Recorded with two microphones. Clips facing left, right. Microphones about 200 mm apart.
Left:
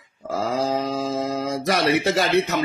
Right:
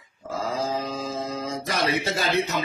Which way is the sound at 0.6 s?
70° left (ahead or behind).